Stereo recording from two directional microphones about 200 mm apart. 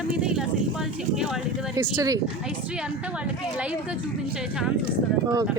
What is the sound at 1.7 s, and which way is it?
Speech, 20° right (ahead or behind).